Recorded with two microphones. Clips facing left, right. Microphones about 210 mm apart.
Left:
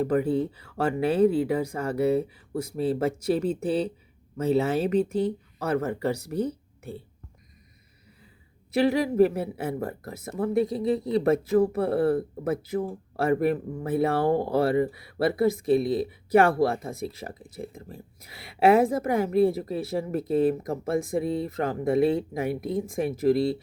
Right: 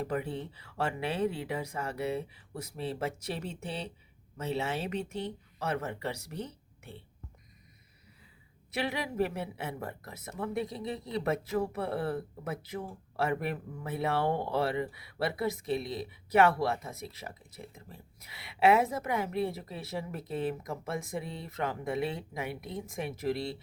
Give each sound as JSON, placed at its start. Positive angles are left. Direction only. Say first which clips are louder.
{"t": 0.0, "sound": "speech", "louder": "left 11 dB", "side_deg": 40}
{"t": 1.2, "sound": "speech", "louder": "left 12 dB", "side_deg": 35}
{"t": 1.7, "sound": "speech", "louder": "left 9 dB", "side_deg": 50}
{"t": 2.6, "sound": "speech", "louder": "left 10 dB", "side_deg": 30}
{"t": 3.4, "sound": "speech", "louder": "left 13 dB", "side_deg": 50}
{"t": 8.8, "sound": "speech", "louder": "left 11 dB", "side_deg": 35}
{"t": 11.3, "sound": "speech", "louder": "left 9 dB", "side_deg": 45}
{"t": 16.9, "sound": "speech", "louder": "left 10 dB", "side_deg": 30}
{"t": 17.2, "sound": "speech", "louder": "left 8 dB", "side_deg": 45}
{"t": 17.8, "sound": "speech", "louder": "left 8 dB", "side_deg": 35}